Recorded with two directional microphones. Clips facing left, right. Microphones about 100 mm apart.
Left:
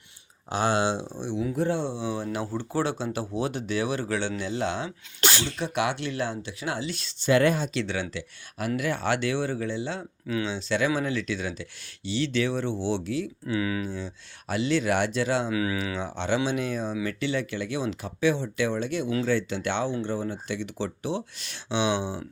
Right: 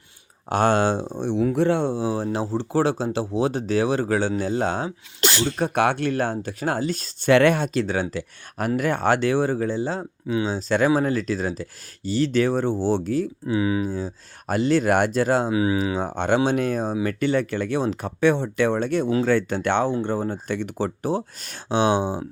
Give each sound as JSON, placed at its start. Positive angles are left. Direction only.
{"t": 0.5, "sound": "speech", "side_deg": -50}
{"t": 1.8, "sound": "speech", "side_deg": -45}
{"t": 7.3, "sound": "speech", "side_deg": -65}
{"t": 7.7, "sound": "speech", "side_deg": -40}
{"t": 13.5, "sound": "speech", "side_deg": -25}
{"t": 13.8, "sound": "speech", "side_deg": -40}
{"t": 15.5, "sound": "speech", "side_deg": -25}